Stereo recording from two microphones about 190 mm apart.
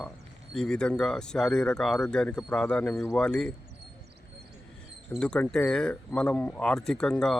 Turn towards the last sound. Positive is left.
turn(degrees=5)  # may be behind; listen again after turning